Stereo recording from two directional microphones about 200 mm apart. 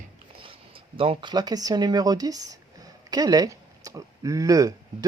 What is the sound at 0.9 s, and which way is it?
Speech, 25° right (ahead or behind).